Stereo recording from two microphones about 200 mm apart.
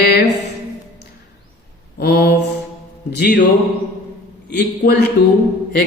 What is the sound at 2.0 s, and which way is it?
A man's voice, 50° left (ahead or behind).